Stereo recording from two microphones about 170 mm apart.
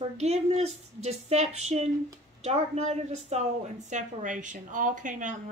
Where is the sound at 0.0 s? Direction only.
40° right (ahead or behind).